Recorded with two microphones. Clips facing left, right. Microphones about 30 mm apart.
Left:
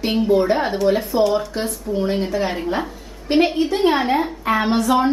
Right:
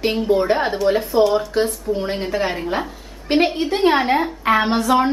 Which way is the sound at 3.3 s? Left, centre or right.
Right.